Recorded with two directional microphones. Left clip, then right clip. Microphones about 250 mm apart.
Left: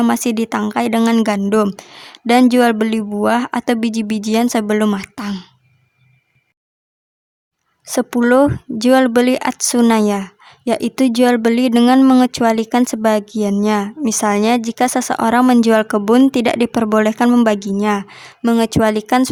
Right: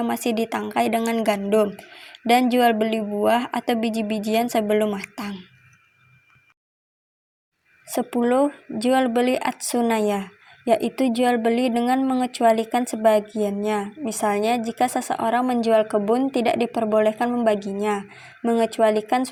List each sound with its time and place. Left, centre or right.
0.0 s speech: left
7.9 s speech: left